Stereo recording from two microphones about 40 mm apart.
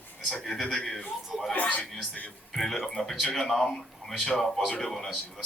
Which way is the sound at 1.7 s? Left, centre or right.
Left.